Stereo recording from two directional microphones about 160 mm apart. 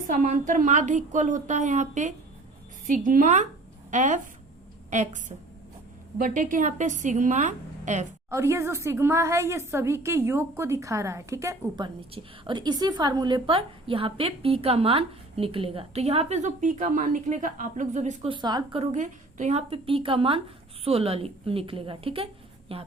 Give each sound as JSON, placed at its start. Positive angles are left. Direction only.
{"t": 0.1, "sound": "a woman's voice", "side_deg": -55}
{"t": 8.3, "sound": "a woman's voice", "side_deg": -15}
{"t": 12.1, "sound": "a woman's voice", "side_deg": -30}
{"t": 18.3, "sound": "a woman's voice", "side_deg": -25}
{"t": 18.8, "sound": "a woman's voice", "side_deg": -45}